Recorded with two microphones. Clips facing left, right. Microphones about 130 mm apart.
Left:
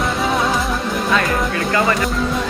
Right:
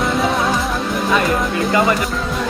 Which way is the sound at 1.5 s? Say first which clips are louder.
Right 3 dB; 15° right (ahead or behind).